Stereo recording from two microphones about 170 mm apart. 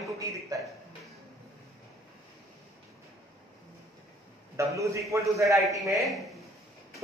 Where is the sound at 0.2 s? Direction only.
20° right (ahead or behind).